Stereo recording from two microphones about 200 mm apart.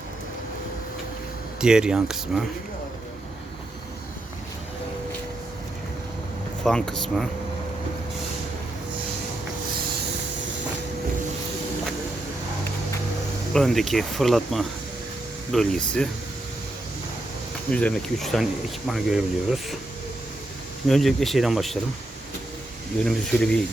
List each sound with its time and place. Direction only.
1.6 s speech: 5° right (ahead or behind)
6.7 s speech: 5° left (ahead or behind)
13.5 s speech: centre (ahead or behind)
17.7 s speech: 5° left (ahead or behind)
20.8 s speech: centre (ahead or behind)
23.0 s speech: 5° left (ahead or behind)